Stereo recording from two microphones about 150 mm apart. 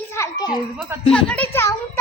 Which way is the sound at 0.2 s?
25° left (ahead or behind).